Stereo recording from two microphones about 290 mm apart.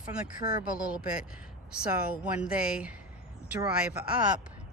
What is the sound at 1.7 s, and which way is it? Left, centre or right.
Speech, centre.